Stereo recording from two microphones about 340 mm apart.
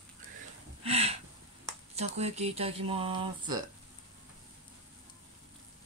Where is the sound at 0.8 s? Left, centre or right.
Centre.